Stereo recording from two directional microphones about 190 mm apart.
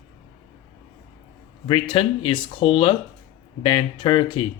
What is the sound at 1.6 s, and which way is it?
Speech, 25° left (ahead or behind).